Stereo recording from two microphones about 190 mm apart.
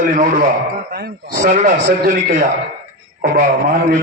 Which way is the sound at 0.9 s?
55° right (ahead or behind).